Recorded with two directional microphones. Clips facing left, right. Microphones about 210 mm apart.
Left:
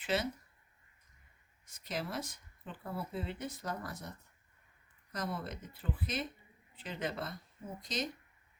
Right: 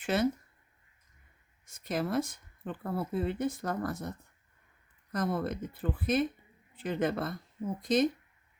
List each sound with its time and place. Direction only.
0.0 s speech: 50° right (ahead or behind)
1.6 s speech: 50° right (ahead or behind)
5.1 s speech: 50° right (ahead or behind)